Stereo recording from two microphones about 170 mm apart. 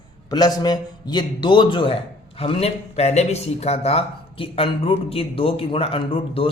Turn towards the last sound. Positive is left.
turn(degrees=30)  # may be behind; listen again after turning